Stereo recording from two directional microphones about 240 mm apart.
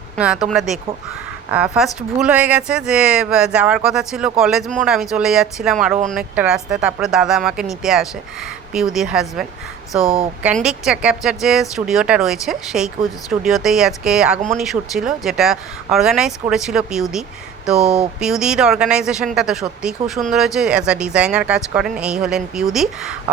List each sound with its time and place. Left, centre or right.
0.2 s speech: centre
10.6 s speech: centre